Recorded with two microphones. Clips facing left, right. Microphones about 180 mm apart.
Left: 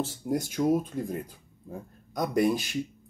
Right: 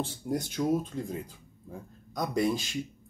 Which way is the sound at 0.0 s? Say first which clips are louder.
Left 3 dB; 5° left (ahead or behind).